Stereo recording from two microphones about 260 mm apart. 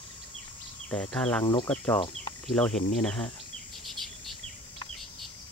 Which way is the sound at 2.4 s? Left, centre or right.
Centre.